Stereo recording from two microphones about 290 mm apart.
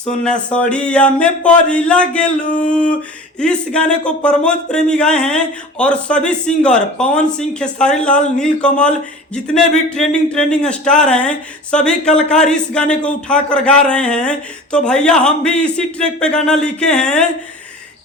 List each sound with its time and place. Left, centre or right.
0.0 s speech: centre
2.4 s a sound: left
2.6 s speech: centre